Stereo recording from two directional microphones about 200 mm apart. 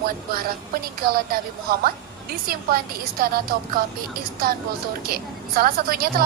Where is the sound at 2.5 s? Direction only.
50° right (ahead or behind).